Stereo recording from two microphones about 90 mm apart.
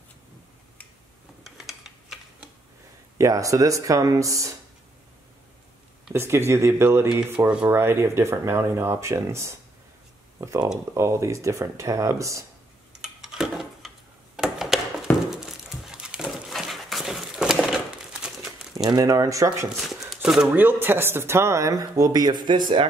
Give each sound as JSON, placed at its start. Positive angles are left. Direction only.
{"t": 1.4, "sound": "a sound", "side_deg": 0}
{"t": 3.2, "sound": "speech", "side_deg": -35}
{"t": 6.1, "sound": "speech", "side_deg": -30}
{"t": 7.2, "sound": "speech", "side_deg": -20}
{"t": 13.0, "sound": "tick-tock", "side_deg": -5}
{"t": 15.2, "sound": "dog", "side_deg": -5}
{"t": 18.2, "sound": "crumpling", "side_deg": -5}
{"t": 18.9, "sound": "speech", "side_deg": -45}
{"t": 20.2, "sound": "shuffling cards", "side_deg": -5}
{"t": 20.5, "sound": "speech", "side_deg": -20}